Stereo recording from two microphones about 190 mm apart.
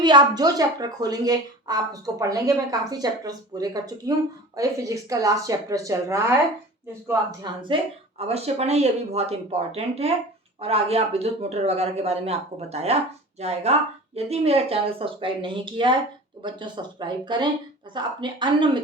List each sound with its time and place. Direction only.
0.0 s a woman's voice: 20° right (ahead or behind)